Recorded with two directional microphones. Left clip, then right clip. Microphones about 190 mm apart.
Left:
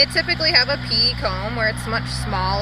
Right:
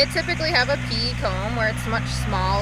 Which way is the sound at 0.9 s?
40° right (ahead or behind).